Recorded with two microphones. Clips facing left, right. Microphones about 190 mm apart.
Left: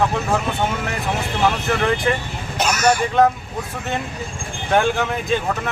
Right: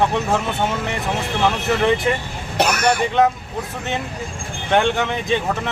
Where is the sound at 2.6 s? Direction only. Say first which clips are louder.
Even; 60° right (ahead or behind).